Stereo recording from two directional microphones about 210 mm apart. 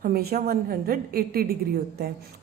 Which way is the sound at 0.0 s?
45° right (ahead or behind).